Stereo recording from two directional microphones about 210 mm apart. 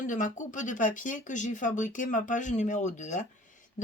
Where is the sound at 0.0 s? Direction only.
40° left (ahead or behind).